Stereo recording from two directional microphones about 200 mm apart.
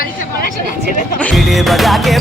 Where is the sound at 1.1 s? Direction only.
5° left (ahead or behind).